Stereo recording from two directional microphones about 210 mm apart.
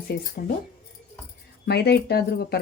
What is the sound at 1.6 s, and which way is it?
Speech, 50° left (ahead or behind).